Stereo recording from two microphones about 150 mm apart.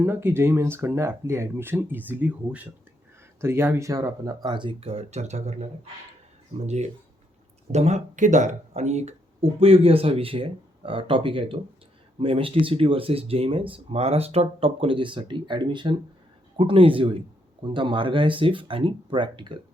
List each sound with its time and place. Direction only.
0.0 s speech: 15° right (ahead or behind); by 5.6 s 50° right (ahead or behind)
6.7 s speech: 45° right (ahead or behind)
9.6 s speech: 40° right (ahead or behind)